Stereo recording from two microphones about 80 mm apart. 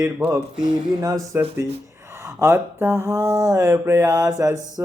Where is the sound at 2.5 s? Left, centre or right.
Right.